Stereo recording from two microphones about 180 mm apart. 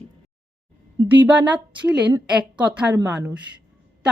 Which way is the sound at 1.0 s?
10° right (ahead or behind).